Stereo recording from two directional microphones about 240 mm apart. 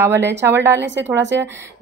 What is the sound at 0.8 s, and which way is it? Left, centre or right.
Speech, right.